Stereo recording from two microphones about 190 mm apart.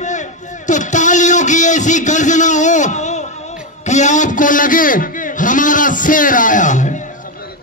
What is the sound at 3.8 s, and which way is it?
A man's voice, 40° left (ahead or behind).